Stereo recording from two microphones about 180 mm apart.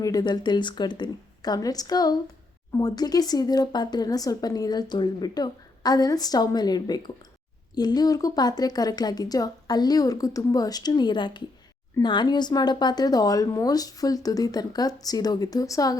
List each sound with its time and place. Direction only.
0.0 s a woman's voice: 20° left (ahead or behind)